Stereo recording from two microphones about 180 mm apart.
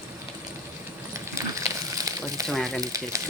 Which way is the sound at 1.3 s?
15° right (ahead or behind).